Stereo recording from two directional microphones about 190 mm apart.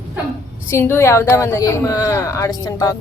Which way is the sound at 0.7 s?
15° left (ahead or behind).